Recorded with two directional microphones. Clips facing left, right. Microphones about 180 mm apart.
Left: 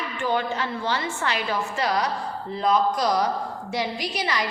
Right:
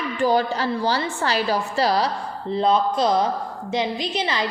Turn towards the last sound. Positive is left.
turn(degrees=-25)  # may be behind; listen again after turning